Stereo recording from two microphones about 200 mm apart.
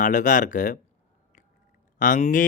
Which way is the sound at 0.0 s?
40° left (ahead or behind).